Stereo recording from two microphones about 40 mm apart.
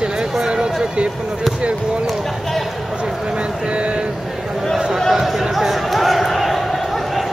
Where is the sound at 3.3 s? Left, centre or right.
Right.